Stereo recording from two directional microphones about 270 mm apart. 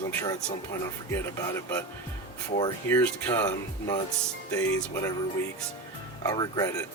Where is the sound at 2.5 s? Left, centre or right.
Centre.